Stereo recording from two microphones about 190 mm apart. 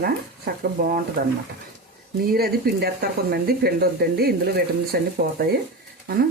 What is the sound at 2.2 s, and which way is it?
Speech, 55° right (ahead or behind).